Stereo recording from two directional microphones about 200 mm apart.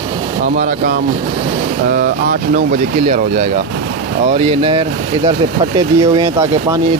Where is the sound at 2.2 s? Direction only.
40° right (ahead or behind).